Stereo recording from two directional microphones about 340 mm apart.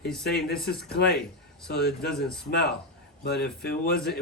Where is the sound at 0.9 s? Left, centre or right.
Left.